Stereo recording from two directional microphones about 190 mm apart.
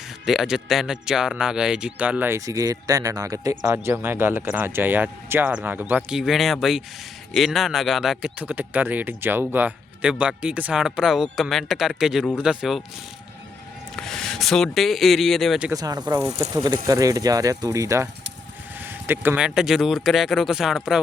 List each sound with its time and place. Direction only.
0.3 s speech: centre (ahead or behind)
13.9 s speech: centre (ahead or behind)
15.7 s speech: 20° right (ahead or behind); by 21.0 s centre (ahead or behind)